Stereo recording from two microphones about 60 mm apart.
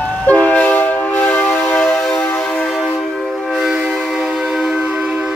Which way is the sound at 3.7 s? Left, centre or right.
Centre.